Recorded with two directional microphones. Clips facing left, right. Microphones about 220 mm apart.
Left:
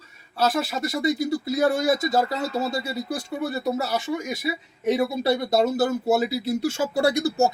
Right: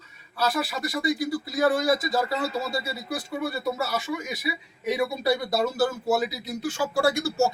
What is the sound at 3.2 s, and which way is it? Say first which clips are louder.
Speech: left 1 dB; 25° left (ahead or behind).